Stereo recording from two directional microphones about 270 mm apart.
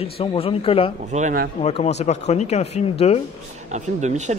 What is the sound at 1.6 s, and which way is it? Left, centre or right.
Speech, left.